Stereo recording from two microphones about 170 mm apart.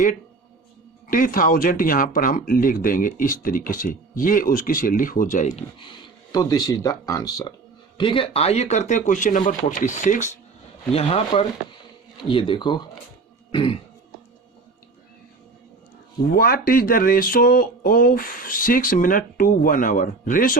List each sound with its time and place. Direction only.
1.1 s speech: 55° left (ahead or behind)
5.8 s a man's voice: 25° left (ahead or behind); by 10.2 s 45° left (ahead or behind)
10.9 s a man's voice: 35° left (ahead or behind)
13.5 s throat clearing: 30° left (ahead or behind)
16.3 s speech: 60° left (ahead or behind)